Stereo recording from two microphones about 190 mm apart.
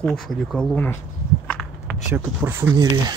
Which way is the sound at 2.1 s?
10° right (ahead or behind).